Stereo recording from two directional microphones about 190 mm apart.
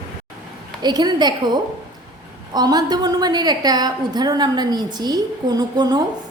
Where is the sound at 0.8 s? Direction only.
20° right (ahead or behind).